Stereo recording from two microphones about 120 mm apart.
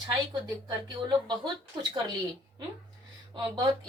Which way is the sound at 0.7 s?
35° right (ahead or behind).